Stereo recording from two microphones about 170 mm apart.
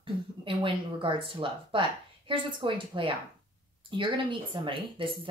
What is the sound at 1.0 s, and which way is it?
Speech, 30° right (ahead or behind).